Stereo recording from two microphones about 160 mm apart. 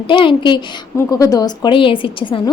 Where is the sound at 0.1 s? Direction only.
30° left (ahead or behind).